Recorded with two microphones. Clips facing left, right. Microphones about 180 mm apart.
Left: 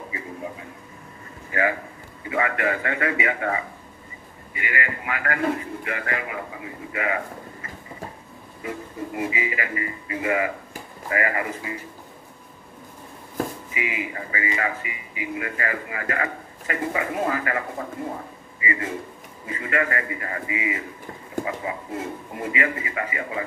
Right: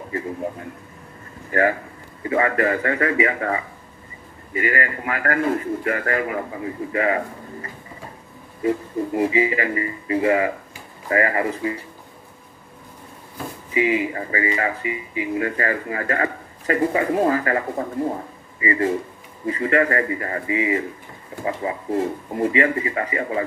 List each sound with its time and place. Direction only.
1.5 s a man's voice: 45° right (ahead or behind)
4.6 s a man's voice: 45° right (ahead or behind)
8.6 s speech: 35° right (ahead or behind)
13.7 s speech: 35° right (ahead or behind)